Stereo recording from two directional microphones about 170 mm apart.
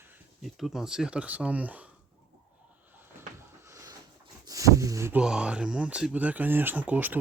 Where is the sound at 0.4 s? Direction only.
Centre (ahead or behind).